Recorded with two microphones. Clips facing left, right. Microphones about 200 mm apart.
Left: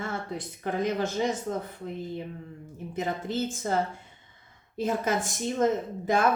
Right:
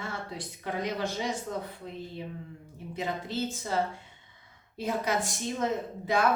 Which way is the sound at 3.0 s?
50° left (ahead or behind).